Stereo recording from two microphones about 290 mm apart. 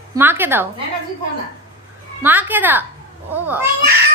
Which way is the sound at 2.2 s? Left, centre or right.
Centre.